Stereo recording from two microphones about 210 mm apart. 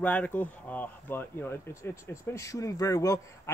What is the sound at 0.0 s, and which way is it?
Speech, 5° left (ahead or behind).